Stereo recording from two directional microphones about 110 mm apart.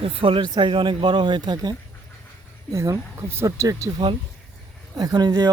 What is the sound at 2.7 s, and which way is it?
Speech, 25° right (ahead or behind).